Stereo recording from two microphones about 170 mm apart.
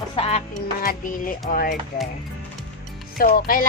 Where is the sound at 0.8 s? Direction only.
55° left (ahead or behind).